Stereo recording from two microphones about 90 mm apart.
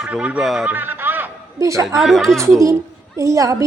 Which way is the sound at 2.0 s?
Centre (ahead or behind).